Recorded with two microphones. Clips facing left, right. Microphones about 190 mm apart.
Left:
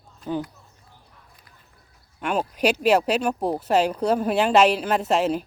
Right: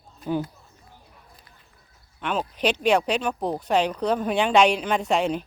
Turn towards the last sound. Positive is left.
turn(degrees=0)  # may be behind; listen again after turning